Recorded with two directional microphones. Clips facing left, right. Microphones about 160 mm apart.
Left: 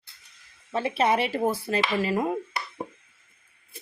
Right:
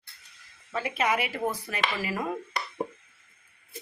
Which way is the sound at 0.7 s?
30° left (ahead or behind).